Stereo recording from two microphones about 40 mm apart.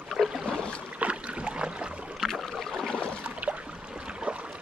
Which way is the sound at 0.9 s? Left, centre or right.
Right.